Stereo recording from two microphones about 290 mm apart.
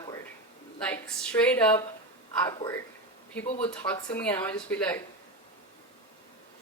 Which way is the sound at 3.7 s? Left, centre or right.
Centre.